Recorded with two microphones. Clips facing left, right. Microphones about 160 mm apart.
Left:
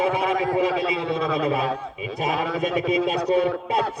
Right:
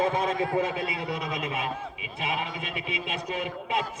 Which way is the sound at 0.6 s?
90° left.